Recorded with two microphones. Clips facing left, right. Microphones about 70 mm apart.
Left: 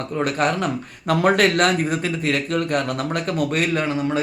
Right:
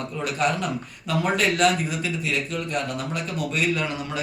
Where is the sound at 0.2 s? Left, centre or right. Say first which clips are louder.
Left 4 dB; left.